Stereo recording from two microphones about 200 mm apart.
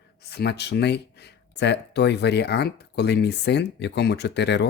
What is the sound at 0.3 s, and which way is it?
Speech, 55° left (ahead or behind).